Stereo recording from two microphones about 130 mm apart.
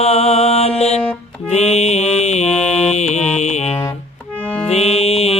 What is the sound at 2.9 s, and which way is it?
Music, 60° left (ahead or behind).